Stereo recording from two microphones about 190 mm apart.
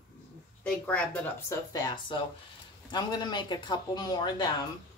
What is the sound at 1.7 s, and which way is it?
Speech, 20° left (ahead or behind).